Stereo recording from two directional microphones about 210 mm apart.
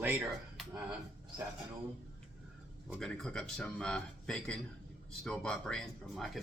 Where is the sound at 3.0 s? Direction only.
5° left (ahead or behind).